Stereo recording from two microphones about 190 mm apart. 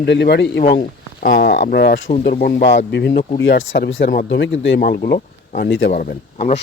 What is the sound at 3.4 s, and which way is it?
Speech, 85° left.